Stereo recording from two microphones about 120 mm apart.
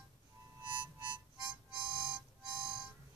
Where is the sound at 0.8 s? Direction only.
40° right (ahead or behind).